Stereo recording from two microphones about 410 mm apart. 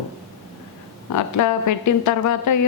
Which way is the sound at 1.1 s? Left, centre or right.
Left.